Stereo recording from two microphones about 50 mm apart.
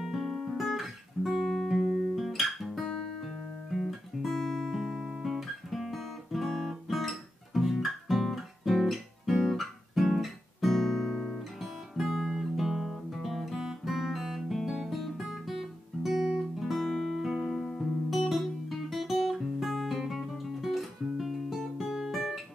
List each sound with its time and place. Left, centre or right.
0.0 s guitar: centre